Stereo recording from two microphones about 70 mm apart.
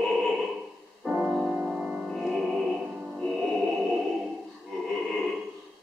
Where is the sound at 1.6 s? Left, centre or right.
Centre.